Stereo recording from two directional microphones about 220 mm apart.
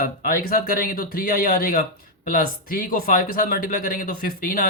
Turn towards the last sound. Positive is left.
turn(degrees=40)  # may be behind; listen again after turning